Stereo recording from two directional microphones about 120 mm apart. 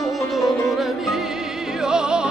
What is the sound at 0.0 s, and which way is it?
Music, centre (ahead or behind).